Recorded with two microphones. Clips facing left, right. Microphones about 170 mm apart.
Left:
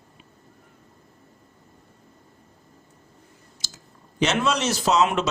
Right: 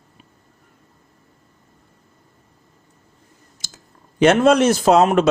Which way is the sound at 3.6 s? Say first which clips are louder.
Right 1 dB; 55° right (ahead or behind).